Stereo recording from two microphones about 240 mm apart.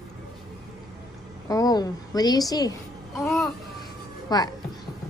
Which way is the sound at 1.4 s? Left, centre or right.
Centre.